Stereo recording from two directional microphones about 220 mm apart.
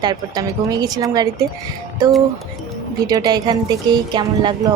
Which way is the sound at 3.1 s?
20° right (ahead or behind).